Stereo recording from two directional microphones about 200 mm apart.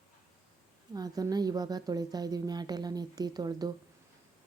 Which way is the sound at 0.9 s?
20° right (ahead or behind).